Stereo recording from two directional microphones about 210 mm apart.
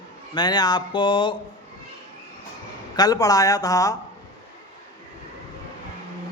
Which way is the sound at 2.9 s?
20° left (ahead or behind).